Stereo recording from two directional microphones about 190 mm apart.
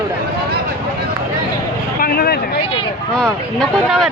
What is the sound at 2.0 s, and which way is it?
Speech, 55° left (ahead or behind).